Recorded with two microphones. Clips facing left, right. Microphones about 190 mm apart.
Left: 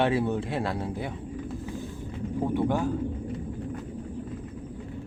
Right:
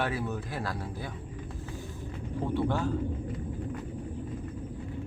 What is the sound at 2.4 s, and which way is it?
Speech, 15° left (ahead or behind).